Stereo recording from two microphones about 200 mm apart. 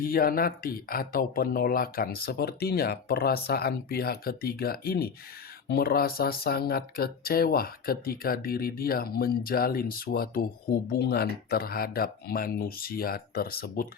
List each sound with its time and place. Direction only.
0.0 s speech: 45° left (ahead or behind)